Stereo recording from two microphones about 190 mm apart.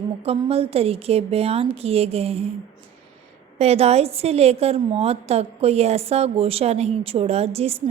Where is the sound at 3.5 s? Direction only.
35° right (ahead or behind).